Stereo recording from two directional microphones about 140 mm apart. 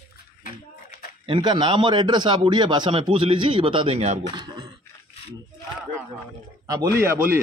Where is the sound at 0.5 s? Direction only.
70° left (ahead or behind).